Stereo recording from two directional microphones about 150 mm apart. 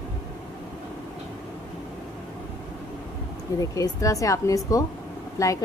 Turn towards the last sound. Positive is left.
turn(degrees=20)  # may be behind; listen again after turning